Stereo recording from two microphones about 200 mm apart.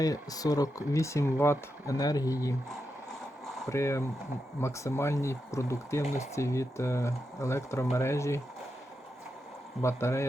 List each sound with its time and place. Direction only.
0.0 s speech: 20° left (ahead or behind)
3.7 s speech: 15° left (ahead or behind)
9.8 s speech: 15° left (ahead or behind)